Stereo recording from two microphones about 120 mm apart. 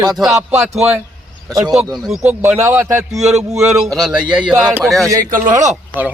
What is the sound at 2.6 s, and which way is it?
Speech, 20° right (ahead or behind).